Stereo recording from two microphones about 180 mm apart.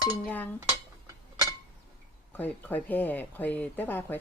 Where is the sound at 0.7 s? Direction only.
15° right (ahead or behind).